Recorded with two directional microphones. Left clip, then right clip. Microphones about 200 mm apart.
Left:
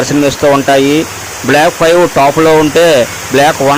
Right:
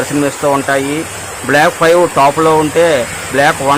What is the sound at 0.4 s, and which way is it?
Speech, 20° left (ahead or behind).